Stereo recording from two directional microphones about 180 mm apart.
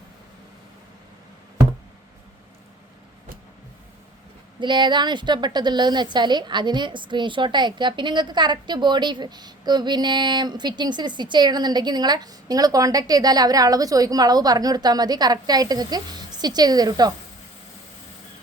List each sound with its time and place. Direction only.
4.6 s a woman's voice: 25° right (ahead or behind)